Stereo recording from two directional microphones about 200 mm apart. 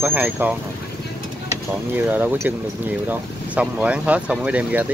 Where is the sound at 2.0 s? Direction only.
10° right (ahead or behind).